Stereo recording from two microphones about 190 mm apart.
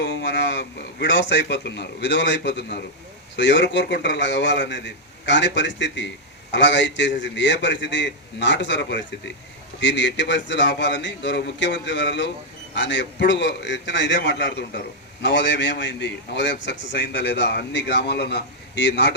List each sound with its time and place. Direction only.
0.0 s a man's voice: 65° left (ahead or behind)